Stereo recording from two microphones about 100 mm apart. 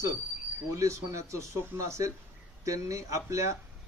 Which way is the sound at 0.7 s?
30° right (ahead or behind).